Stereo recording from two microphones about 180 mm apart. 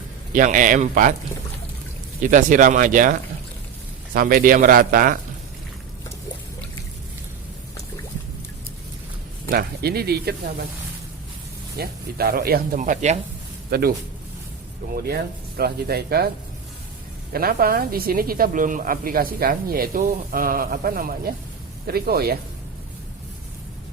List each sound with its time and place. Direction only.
0.3 s a woman's voice: 45° right (ahead or behind)
2.2 s a woman's voice: 45° right (ahead or behind)
9.5 s speech: 60° right (ahead or behind)
11.8 s a woman's voice: 60° right (ahead or behind); by 13.1 s 40° right (ahead or behind)
13.7 s speech: 60° right (ahead or behind)
14.9 s speech: 60° right (ahead or behind)
17.3 s a woman's voice: 55° right (ahead or behind)